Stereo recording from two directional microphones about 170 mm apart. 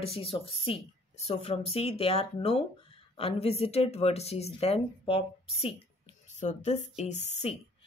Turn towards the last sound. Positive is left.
turn(degrees=40)  # may be behind; listen again after turning